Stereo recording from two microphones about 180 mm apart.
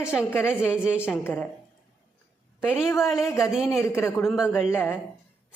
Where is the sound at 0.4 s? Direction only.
10° left (ahead or behind).